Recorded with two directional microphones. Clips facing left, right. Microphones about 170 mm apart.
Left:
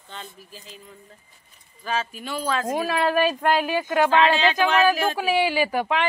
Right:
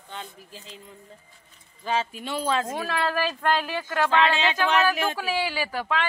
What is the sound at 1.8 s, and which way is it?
Speech, 20° right (ahead or behind).